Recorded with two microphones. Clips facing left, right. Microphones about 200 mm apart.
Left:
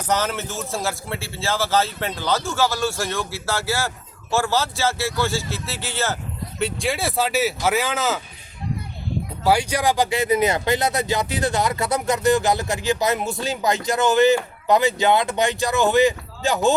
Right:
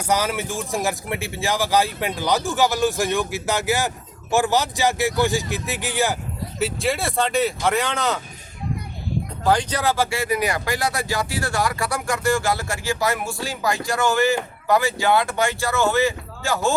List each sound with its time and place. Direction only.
0.1 s speech: 10° right (ahead or behind)
6.6 s speech: 5° right (ahead or behind)
9.4 s speech: 10° left (ahead or behind)